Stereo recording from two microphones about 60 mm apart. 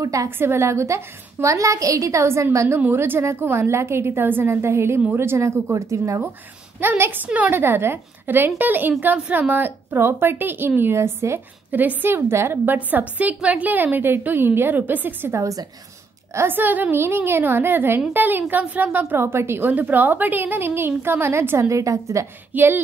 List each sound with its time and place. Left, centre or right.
0.0 s a sound: right
0.4 s a woman's voice: right
6.8 s a woman's voice: right
7.5 s a woman's voice: right
11.7 s a woman's voice: right
13.2 s a woman's voice: right
15.3 s a woman's voice: right
16.3 s a woman's voice: right
16.9 s a woman's voice: right
19.7 s a woman's voice: right
22.5 s speech: right